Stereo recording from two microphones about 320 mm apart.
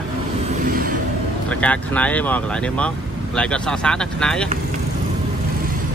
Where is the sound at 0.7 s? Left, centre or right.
Right.